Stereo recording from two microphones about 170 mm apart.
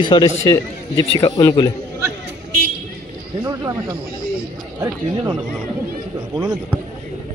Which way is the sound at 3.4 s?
20° right (ahead or behind).